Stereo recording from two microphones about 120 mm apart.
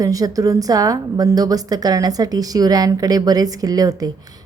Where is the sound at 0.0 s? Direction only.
30° right (ahead or behind).